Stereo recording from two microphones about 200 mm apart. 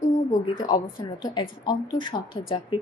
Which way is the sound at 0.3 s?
20° left (ahead or behind).